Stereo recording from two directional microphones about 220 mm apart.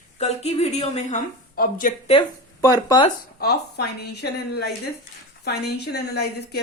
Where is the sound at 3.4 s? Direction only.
45° left (ahead or behind).